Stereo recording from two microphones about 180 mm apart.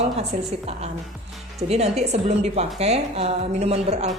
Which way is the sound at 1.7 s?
35° right (ahead or behind).